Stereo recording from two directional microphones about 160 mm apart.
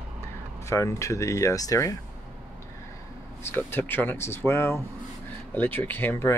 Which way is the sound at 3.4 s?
15° left (ahead or behind).